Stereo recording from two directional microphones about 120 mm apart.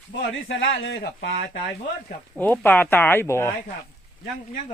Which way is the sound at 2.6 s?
15° left (ahead or behind).